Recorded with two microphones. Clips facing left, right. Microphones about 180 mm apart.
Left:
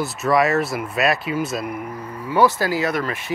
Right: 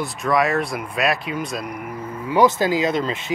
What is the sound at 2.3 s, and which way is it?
Speech, 20° right (ahead or behind).